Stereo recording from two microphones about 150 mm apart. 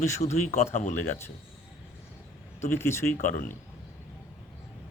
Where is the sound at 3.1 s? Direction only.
60° left (ahead or behind).